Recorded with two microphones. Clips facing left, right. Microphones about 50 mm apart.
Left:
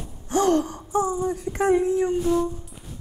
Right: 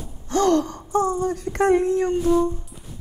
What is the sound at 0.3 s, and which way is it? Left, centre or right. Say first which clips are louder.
Gasp: right 1 dB; right.